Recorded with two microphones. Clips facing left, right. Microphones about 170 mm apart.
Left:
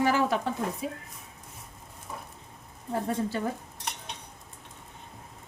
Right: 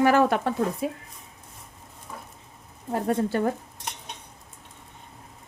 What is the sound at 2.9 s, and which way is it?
Speech, 55° right (ahead or behind).